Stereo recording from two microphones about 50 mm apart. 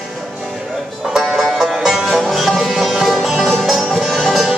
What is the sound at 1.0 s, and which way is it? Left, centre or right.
Music, centre.